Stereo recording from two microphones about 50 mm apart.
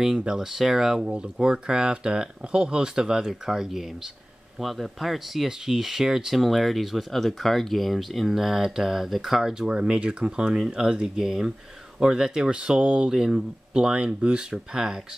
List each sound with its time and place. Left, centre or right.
0.2 s speech: centre
0.5 s speech: centre
9.7 s speech: right